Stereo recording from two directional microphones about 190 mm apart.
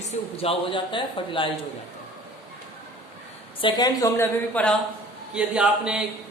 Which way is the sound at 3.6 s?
25° left (ahead or behind).